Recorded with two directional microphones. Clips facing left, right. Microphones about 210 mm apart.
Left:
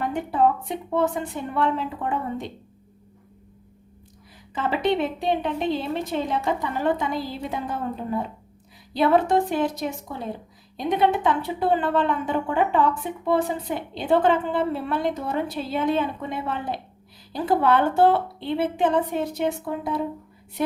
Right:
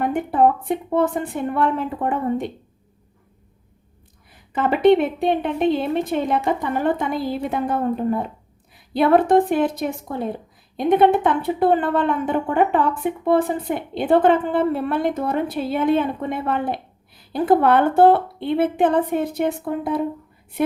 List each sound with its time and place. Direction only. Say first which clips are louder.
0.0 s a woman's voice: right 4 dB; 55° right (ahead or behind)
4.5 s a woman's voice: right 8 dB; 55° right (ahead or behind)